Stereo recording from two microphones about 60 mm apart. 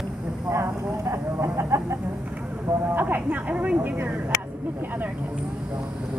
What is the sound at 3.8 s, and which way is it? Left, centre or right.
Speech, right.